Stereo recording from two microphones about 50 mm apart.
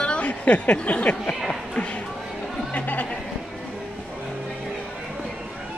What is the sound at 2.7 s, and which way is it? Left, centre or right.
Chatter, left.